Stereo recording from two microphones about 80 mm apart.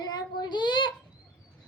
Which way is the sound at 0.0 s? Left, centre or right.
Left.